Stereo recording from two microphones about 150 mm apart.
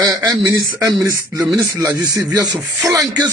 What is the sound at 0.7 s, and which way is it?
Speech, 25° right (ahead or behind).